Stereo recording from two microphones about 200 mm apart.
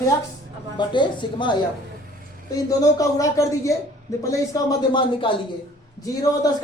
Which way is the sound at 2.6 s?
15° left (ahead or behind).